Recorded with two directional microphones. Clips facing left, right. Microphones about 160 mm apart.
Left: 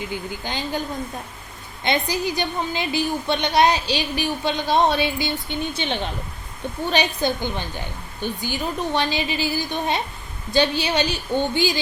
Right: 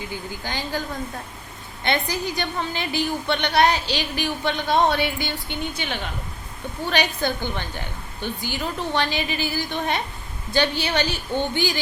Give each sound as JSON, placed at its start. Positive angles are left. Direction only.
{"t": 0.0, "sound": "a woman's voice", "side_deg": 20}